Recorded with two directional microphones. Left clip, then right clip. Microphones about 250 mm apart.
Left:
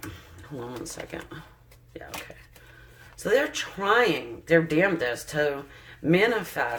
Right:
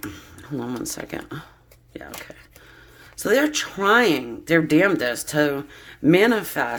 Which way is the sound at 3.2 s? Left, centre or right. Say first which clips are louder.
Right 4 dB; right.